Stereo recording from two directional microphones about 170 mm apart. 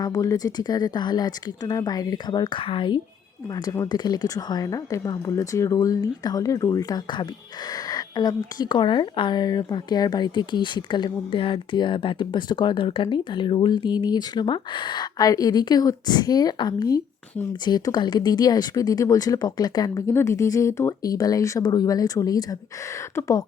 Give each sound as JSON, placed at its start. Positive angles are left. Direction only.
{"t": 0.0, "sound": "speech", "side_deg": 20}